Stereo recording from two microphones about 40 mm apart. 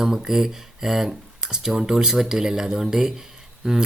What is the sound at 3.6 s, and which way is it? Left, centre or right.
Speech, right.